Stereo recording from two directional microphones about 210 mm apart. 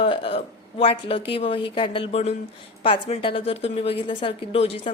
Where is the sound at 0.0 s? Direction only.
25° left (ahead or behind).